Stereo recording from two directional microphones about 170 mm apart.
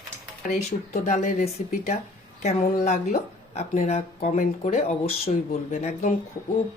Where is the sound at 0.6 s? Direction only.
45° left (ahead or behind).